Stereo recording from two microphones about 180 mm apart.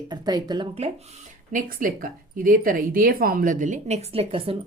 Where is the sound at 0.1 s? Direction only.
20° right (ahead or behind).